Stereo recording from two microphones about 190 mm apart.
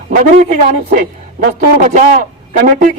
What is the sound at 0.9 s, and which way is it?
A man's voice, 50° right (ahead or behind).